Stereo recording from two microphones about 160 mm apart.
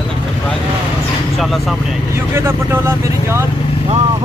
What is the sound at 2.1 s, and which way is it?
Speech, 15° right (ahead or behind).